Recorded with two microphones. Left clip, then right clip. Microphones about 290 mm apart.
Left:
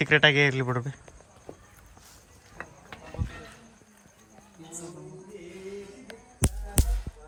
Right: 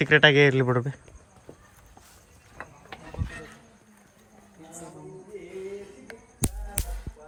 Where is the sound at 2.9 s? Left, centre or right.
Centre.